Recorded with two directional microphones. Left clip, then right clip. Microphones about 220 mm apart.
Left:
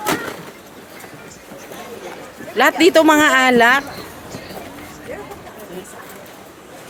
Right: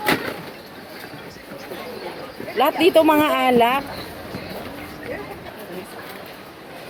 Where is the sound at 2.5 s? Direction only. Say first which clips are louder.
Left 3 dB; 35° left (ahead or behind).